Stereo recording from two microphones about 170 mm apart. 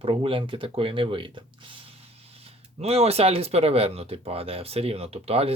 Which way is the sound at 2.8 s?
40° right (ahead or behind).